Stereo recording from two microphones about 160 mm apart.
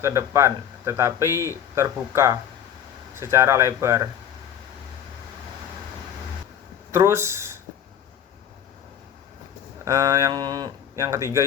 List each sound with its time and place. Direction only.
0.0 s speech: 20° right (ahead or behind)
6.9 s speech: 15° right (ahead or behind)
9.8 s speech: 20° right (ahead or behind)